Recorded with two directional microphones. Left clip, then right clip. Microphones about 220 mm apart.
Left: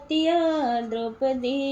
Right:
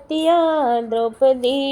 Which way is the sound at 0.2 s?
20° right (ahead or behind).